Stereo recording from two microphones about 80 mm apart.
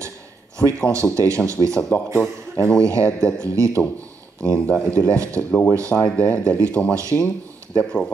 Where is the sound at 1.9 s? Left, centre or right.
Left.